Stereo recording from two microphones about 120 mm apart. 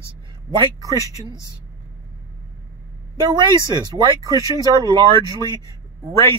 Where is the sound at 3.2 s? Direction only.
40° right (ahead or behind).